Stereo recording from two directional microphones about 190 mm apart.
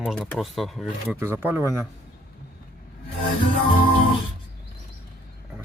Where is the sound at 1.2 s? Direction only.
10° right (ahead or behind).